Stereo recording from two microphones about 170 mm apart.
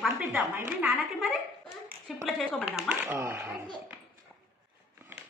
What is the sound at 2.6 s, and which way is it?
Speech, 10° right (ahead or behind).